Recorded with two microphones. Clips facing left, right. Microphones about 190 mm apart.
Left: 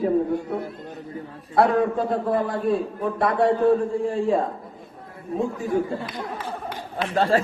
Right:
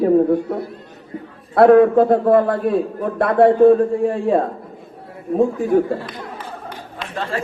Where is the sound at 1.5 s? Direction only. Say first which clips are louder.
Right 10 dB; 60° right (ahead or behind).